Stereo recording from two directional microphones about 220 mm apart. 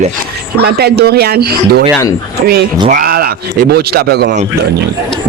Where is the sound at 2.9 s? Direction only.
45° right (ahead or behind).